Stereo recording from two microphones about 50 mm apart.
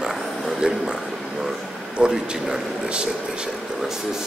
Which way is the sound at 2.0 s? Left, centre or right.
Centre.